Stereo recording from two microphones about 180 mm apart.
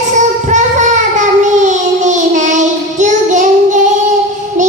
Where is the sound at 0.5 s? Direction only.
40° right (ahead or behind).